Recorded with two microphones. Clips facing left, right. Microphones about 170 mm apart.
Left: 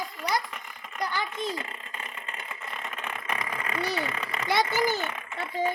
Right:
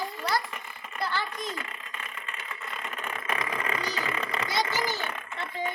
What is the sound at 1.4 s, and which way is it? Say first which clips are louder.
Mechanisms: left 4 dB; 30° left (ahead or behind).